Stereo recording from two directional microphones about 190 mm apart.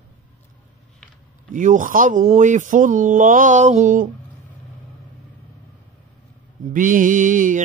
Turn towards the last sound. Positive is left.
turn(degrees=-45)  # may be behind; listen again after turning